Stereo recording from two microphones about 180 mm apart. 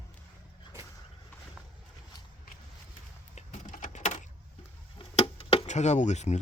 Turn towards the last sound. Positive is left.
turn(degrees=40)  # may be behind; listen again after turning